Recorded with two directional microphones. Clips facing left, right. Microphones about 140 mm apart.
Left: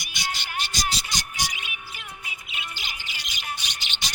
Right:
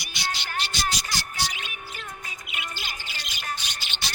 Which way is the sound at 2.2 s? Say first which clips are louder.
Right 1 dB; 40° right (ahead or behind).